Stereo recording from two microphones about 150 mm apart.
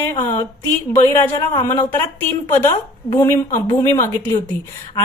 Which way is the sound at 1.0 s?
15° left (ahead or behind).